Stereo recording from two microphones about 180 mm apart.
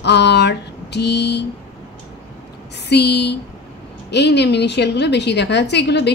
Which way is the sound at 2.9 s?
65° left (ahead or behind).